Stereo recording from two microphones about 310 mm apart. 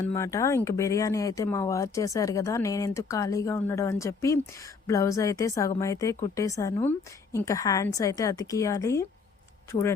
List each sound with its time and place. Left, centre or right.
0.0 s speech: centre